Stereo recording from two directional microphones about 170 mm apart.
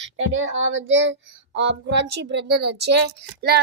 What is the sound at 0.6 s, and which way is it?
Speech, 90° right.